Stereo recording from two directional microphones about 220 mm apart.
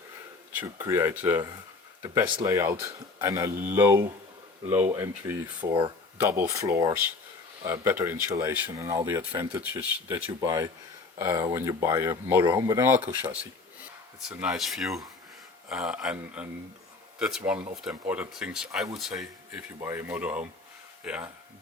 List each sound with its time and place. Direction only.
0.5 s speech: 10° right (ahead or behind)